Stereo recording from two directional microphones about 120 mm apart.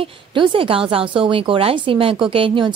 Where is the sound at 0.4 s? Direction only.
50° right (ahead or behind).